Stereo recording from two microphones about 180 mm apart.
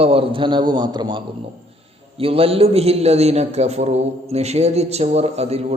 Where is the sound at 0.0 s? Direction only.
30° right (ahead or behind).